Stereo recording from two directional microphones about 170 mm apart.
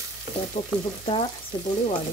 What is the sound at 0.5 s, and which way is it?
Frying, 35° left (ahead or behind).